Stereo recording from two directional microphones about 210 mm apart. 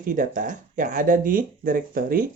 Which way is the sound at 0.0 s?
40° right (ahead or behind).